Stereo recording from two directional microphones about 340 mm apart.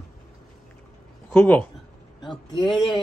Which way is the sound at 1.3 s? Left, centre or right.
Centre.